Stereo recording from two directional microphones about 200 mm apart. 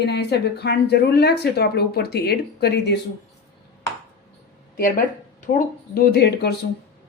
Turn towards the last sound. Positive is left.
turn(degrees=55)  # may be behind; listen again after turning